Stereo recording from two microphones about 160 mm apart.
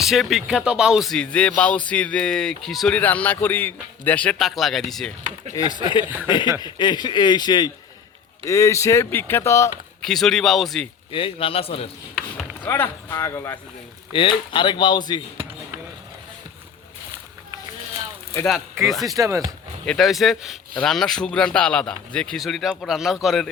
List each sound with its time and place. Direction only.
0.0 s speech: centre (ahead or behind)
5.6 s a man's voice: 20° left (ahead or behind)
10.0 s speech: 5° left (ahead or behind)
11.1 s a man's voice: 35° left (ahead or behind)
12.6 s speech: 15° left (ahead or behind)
14.1 s a man's voice: 30° left (ahead or behind)
19.0 s speech: 20° right (ahead or behind)
19.8 s speech: 5° left (ahead or behind)